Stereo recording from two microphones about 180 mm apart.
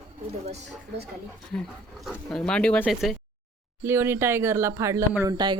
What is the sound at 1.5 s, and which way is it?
Speech, 5° left (ahead or behind).